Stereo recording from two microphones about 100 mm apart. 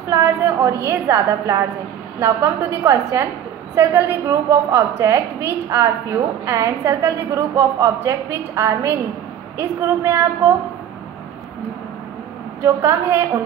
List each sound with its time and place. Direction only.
0.1 s a woman's voice: 25° right (ahead or behind)
12.6 s a woman's voice: 25° right (ahead or behind)